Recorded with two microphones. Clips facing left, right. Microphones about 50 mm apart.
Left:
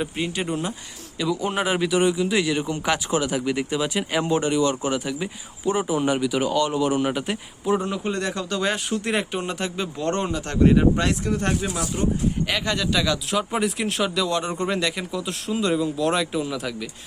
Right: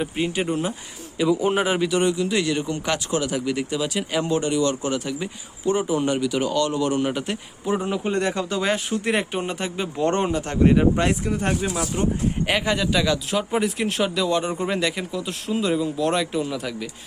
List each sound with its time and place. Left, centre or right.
0.0 s speech: centre
7.8 s speech: centre
10.6 s speech: centre
10.9 s speech: right
11.3 s speech: centre